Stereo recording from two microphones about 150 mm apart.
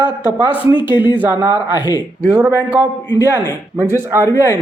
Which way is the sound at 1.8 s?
30° left (ahead or behind).